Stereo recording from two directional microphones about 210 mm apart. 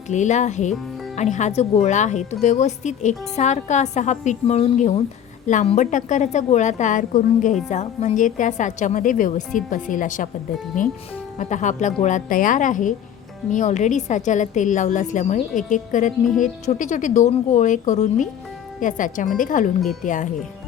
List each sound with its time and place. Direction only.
0.1 s speech: 35° left (ahead or behind)